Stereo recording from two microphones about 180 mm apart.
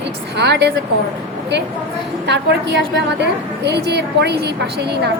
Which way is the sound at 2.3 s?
70° right (ahead or behind).